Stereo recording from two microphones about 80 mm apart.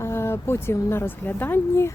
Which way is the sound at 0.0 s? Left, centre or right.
Left.